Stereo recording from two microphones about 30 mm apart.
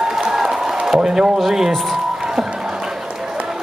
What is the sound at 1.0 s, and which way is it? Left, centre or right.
Speech, right.